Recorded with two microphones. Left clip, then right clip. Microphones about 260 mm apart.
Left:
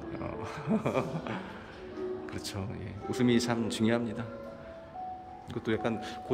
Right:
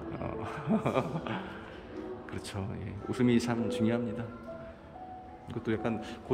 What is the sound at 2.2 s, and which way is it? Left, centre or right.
Speech, centre.